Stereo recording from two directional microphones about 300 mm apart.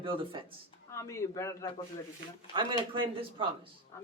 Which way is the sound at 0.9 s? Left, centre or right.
Centre.